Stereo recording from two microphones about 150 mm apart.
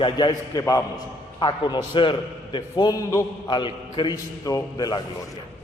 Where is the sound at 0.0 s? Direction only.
30° left (ahead or behind).